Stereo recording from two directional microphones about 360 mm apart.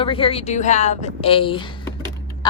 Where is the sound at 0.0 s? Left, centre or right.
Centre.